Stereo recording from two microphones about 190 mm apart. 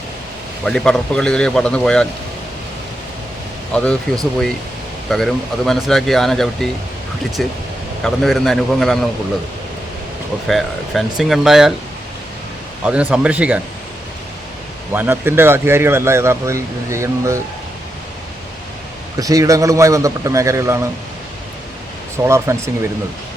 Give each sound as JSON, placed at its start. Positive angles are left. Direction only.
{"t": 0.6, "sound": "speech", "side_deg": 5}
{"t": 3.8, "sound": "speech", "side_deg": 5}
{"t": 10.4, "sound": "speech", "side_deg": 0}
{"t": 12.8, "sound": "speech", "side_deg": -5}
{"t": 14.9, "sound": "speech", "side_deg": -10}
{"t": 19.1, "sound": "speech", "side_deg": -20}
{"t": 22.2, "sound": "speech", "side_deg": -15}